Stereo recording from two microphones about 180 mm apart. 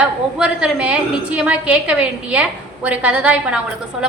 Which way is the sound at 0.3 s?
5° right (ahead or behind).